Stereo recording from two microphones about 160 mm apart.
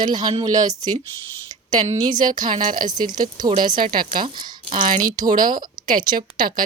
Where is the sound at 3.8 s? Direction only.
60° right (ahead or behind).